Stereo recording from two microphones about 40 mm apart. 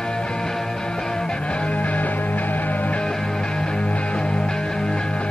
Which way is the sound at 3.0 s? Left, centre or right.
Centre.